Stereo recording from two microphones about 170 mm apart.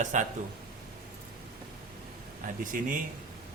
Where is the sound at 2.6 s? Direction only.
50° right (ahead or behind).